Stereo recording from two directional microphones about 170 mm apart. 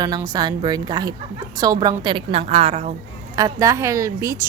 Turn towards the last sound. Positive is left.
turn(degrees=-20)  # may be behind; listen again after turning